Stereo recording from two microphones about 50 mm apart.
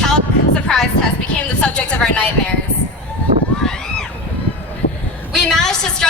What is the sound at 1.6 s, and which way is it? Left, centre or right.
Speech, left.